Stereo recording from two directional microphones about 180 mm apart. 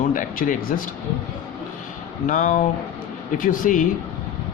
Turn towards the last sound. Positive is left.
turn(degrees=50)  # may be behind; listen again after turning